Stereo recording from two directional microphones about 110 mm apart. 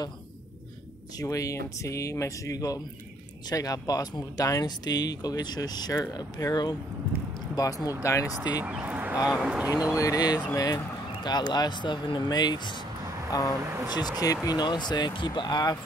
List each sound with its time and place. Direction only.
1.1 s speech: 30° left (ahead or behind)
8.4 s speech: 15° right (ahead or behind)
9.9 s speech: 35° left (ahead or behind)